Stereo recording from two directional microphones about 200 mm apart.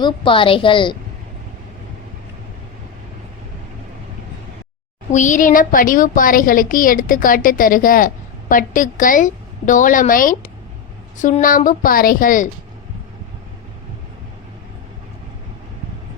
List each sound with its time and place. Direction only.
0.0 s a woman's voice: 25° left (ahead or behind)
5.1 s a woman's voice: 40° left (ahead or behind)